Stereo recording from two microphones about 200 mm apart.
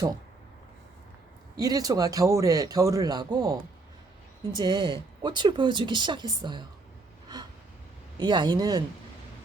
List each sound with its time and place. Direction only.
1.5 s a man's voice: 20° right (ahead or behind)
8.2 s speech: 20° right (ahead or behind)